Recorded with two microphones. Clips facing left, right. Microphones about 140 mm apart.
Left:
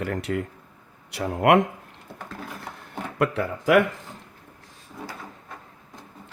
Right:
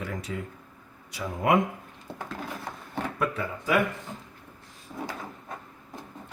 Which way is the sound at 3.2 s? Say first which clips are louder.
Left 8 dB; 70° left (ahead or behind).